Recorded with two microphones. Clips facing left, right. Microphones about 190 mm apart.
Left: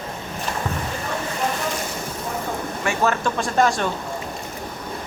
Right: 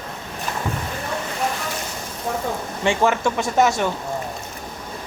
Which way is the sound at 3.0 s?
10° right (ahead or behind).